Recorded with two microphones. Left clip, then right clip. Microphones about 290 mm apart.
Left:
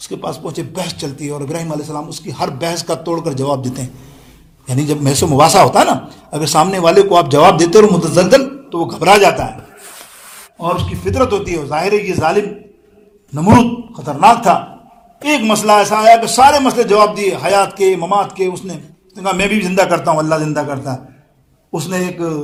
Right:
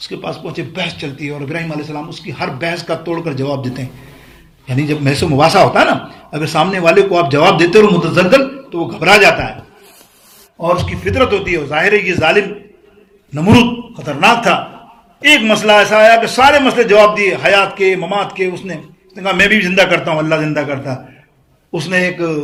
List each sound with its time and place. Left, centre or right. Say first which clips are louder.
0.1 s a man's voice: left 1 dB; left
10.6 s a man's voice: right 3 dB; centre
13.9 s a man's voice: left 3 dB; centre